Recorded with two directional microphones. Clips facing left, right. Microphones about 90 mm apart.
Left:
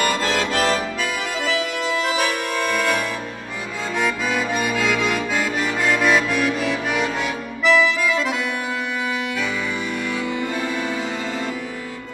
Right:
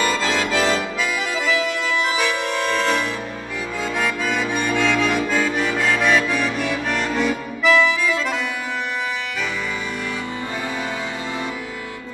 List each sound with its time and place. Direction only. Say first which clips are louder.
0.0 s accordion: even; 45° left (ahead or behind)
4.0 s accordion: left 2 dB; centre (ahead or behind)